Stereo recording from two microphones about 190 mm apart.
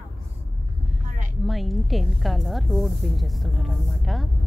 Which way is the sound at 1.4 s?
Centre (ahead or behind).